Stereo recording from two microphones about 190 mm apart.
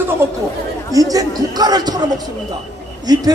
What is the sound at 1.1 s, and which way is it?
Speech, 20° right (ahead or behind).